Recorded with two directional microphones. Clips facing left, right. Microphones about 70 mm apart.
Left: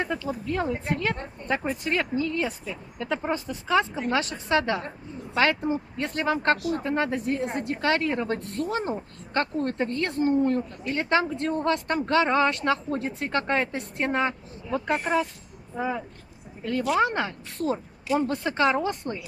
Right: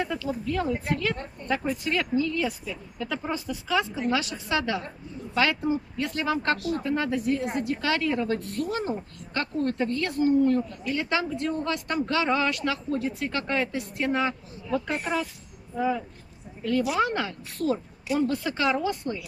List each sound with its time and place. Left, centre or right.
0.0 s a woman's voice: left
15.7 s speech: left
17.0 s a woman's voice: left